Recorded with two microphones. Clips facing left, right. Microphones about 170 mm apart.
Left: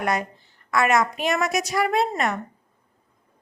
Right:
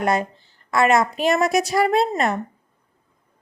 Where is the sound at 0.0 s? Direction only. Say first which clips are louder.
Right 4 dB; 30° right (ahead or behind).